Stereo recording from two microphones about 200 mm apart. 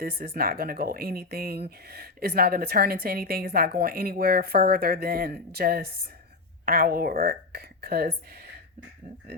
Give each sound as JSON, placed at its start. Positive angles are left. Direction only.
{"t": 0.0, "sound": "a woman's voice", "side_deg": -45}